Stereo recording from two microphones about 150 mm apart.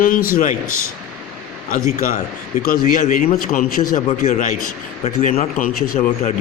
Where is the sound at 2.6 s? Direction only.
75° left (ahead or behind).